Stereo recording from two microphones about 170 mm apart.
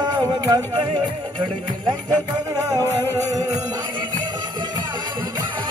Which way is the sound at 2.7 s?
20° right (ahead or behind).